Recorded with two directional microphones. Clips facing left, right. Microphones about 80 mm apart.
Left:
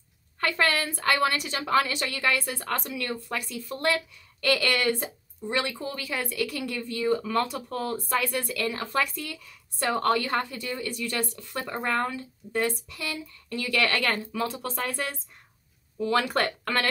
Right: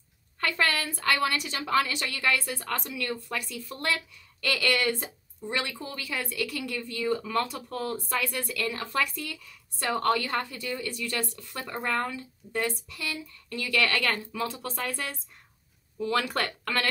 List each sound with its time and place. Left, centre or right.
0.4 s a woman's voice: left
3.0 s a woman's voice: left